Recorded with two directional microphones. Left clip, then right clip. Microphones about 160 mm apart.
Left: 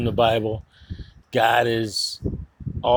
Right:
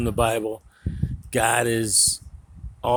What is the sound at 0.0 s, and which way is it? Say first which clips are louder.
Speech: left 3 dB; 35° right (ahead or behind).